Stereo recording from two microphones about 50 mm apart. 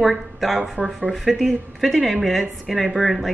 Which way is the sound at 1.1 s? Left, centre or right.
Centre.